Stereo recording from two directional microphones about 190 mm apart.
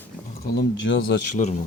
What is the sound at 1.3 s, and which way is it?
Speech, 40° left (ahead or behind).